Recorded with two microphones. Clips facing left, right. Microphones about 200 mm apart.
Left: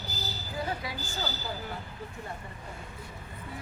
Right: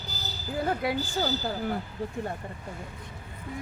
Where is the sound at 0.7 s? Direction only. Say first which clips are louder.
Right 11 dB; 60° right (ahead or behind).